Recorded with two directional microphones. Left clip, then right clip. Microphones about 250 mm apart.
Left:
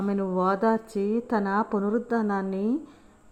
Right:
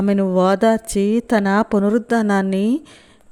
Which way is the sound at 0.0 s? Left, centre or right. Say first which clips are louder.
Right 9 dB; right.